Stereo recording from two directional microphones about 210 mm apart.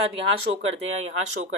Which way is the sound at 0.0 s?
25° right (ahead or behind).